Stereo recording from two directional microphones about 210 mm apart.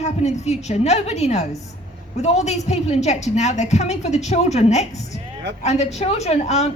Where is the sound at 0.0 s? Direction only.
30° left (ahead or behind).